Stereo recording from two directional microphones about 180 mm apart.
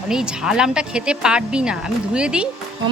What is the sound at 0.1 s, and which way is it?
Speech, 5° right (ahead or behind).